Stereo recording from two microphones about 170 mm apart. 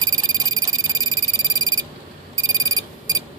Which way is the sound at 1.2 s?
20° right (ahead or behind).